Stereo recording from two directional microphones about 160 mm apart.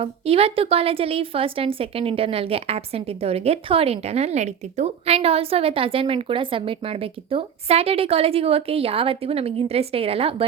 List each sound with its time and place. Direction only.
0.0 s a woman's voice: 40° right (ahead or behind)